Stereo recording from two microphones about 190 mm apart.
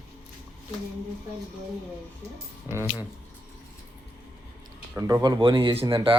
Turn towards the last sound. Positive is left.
turn(degrees=-25)  # may be behind; listen again after turning